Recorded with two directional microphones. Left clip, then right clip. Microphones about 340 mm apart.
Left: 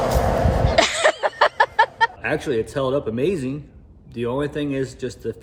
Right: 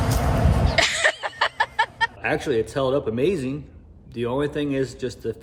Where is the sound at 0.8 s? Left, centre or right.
Centre.